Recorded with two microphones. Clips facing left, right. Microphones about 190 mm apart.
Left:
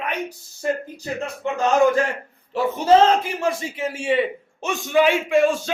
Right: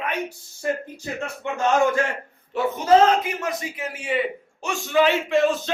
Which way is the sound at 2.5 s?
30° left (ahead or behind).